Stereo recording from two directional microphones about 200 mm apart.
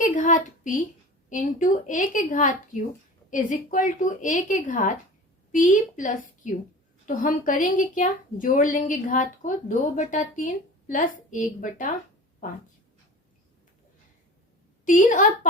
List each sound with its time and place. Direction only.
0.0 s a woman's voice: 40° left (ahead or behind)
14.8 s a woman's voice: 40° left (ahead or behind)